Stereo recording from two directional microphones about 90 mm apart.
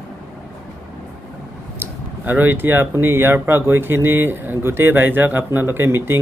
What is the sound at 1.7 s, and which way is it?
Speech, 20° right (ahead or behind).